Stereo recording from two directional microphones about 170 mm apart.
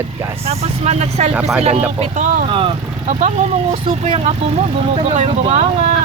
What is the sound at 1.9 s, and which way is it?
Speech, 45° right (ahead or behind).